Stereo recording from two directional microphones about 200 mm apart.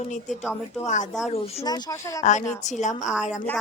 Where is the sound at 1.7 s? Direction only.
20° left (ahead or behind).